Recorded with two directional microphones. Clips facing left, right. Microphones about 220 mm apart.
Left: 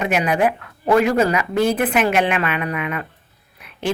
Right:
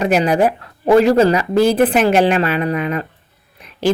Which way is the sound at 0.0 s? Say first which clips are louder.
Right 4 dB; 35° right (ahead or behind).